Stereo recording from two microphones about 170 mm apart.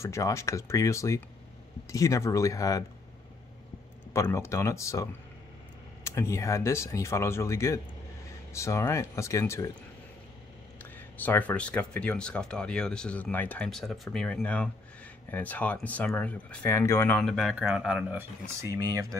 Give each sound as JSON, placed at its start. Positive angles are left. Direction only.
{"t": 0.0, "sound": "speech", "side_deg": 15}
{"t": 4.1, "sound": "speech", "side_deg": 15}
{"t": 10.8, "sound": "speech", "side_deg": 10}
{"t": 17.2, "sound": "speech", "side_deg": 0}
{"t": 18.6, "sound": "speech", "side_deg": -20}